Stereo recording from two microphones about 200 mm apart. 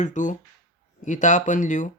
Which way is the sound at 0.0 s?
40° left (ahead or behind).